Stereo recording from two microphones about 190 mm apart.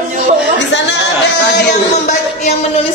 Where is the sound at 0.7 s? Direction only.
70° left (ahead or behind).